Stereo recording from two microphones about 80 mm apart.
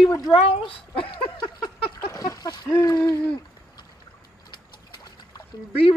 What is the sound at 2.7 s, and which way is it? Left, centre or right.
Speech, left.